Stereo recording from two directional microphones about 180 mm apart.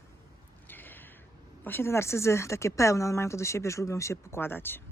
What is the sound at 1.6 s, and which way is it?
Speech, 10° left (ahead or behind).